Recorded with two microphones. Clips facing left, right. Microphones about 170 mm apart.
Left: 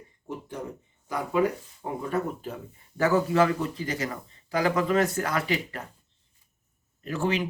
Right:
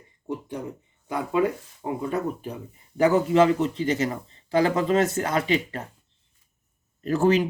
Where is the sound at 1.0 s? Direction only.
25° right (ahead or behind).